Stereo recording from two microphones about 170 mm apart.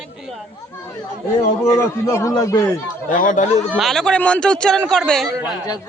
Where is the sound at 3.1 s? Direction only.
50° left (ahead or behind).